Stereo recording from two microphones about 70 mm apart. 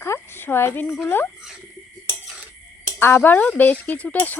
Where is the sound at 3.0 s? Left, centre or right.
Left.